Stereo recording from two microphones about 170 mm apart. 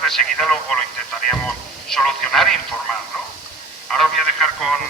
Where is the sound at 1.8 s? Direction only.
5° left (ahead or behind).